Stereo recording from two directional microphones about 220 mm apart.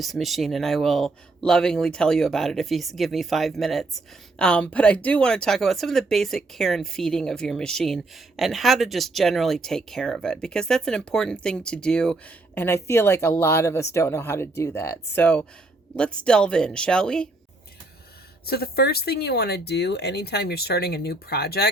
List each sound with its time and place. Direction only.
0.0 s speech: centre (ahead or behind)
18.4 s speech: 45° left (ahead or behind)